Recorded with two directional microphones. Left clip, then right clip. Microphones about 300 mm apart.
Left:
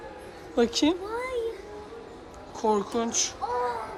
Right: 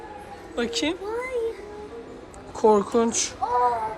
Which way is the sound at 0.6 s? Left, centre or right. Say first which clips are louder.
Left 2 dB; centre.